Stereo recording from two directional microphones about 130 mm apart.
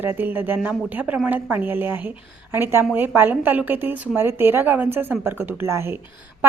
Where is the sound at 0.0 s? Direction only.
15° right (ahead or behind).